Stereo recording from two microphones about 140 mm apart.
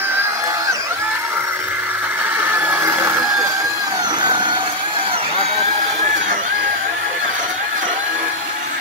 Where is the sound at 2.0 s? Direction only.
15° right (ahead or behind).